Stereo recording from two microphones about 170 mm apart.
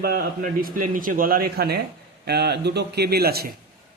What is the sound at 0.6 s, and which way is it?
A man's voice, 55° right (ahead or behind).